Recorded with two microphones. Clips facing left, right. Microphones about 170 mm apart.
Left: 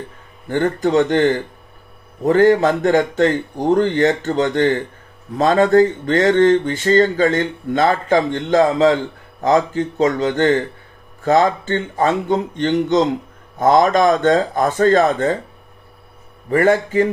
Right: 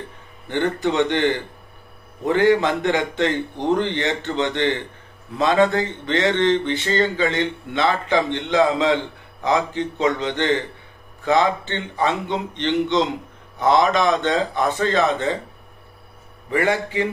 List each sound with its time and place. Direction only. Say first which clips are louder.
0.5 s speech: left 4 dB; 45° left (ahead or behind)
16.4 s speech: left 6 dB; 45° left (ahead or behind)